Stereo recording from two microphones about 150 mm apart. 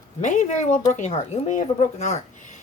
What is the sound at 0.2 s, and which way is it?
Speech, 55° left (ahead or behind).